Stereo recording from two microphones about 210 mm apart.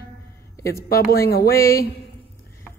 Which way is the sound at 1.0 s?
45° left (ahead or behind).